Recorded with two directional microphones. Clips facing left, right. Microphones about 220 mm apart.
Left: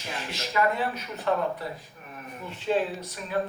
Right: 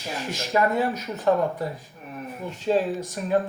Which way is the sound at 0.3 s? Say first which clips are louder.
Right 3 dB; 45° right (ahead or behind).